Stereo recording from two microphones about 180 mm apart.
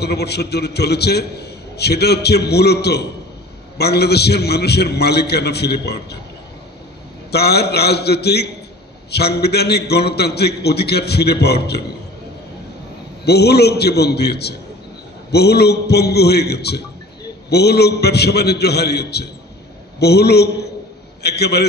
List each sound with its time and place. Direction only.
0.0 s a man's voice: 65° left (ahead or behind)
7.2 s a man's voice: 65° left (ahead or behind)
13.2 s a man's voice: 65° left (ahead or behind)